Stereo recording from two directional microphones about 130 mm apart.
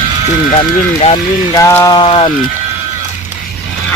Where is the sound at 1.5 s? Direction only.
25° left (ahead or behind).